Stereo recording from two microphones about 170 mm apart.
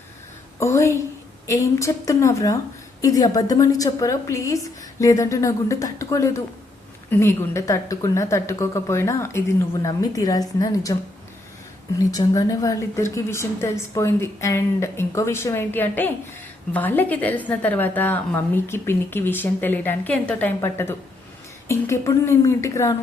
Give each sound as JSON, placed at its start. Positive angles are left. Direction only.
{"t": 0.6, "sound": "a woman's voice", "side_deg": 15}
{"t": 11.9, "sound": "a woman's voice", "side_deg": 20}